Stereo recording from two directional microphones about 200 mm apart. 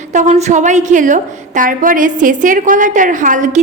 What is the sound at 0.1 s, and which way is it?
A woman's voice, 35° right (ahead or behind).